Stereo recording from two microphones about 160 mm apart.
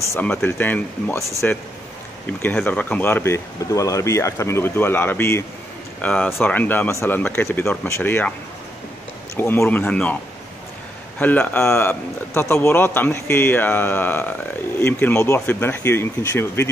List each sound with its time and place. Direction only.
0.1 s a man's voice: 10° left (ahead or behind)
9.4 s a man's voice: 15° left (ahead or behind)
11.1 s a man's voice: 10° left (ahead or behind)